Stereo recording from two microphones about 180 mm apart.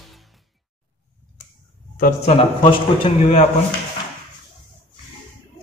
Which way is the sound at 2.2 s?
35° left (ahead or behind).